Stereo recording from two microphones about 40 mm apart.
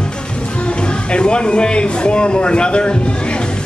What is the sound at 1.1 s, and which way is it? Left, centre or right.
Speech, left.